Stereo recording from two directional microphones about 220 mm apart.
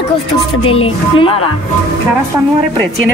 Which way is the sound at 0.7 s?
25° left (ahead or behind).